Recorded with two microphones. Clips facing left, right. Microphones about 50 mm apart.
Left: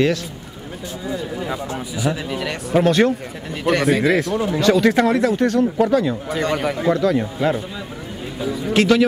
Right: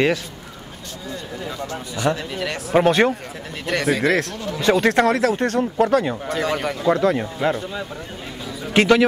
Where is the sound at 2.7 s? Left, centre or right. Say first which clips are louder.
Even; centre.